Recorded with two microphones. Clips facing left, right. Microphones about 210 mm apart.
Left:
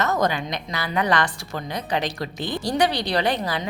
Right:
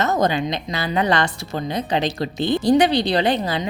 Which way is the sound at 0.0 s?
25° right (ahead or behind).